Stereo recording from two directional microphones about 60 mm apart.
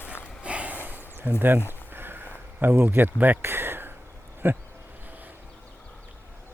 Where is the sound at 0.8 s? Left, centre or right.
Right.